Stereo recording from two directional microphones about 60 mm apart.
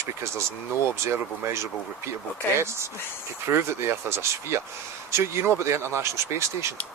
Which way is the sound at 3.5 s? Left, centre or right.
Right.